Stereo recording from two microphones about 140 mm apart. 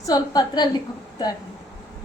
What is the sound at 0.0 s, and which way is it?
Speech, 30° left (ahead or behind).